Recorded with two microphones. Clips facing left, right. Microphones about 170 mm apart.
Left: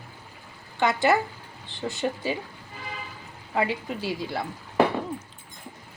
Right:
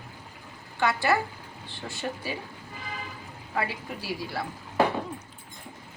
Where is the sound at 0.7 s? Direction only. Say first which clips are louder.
Left 3 dB; 20° left (ahead or behind).